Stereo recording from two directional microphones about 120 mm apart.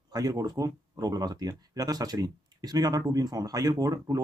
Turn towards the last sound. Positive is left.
turn(degrees=-30)  # may be behind; listen again after turning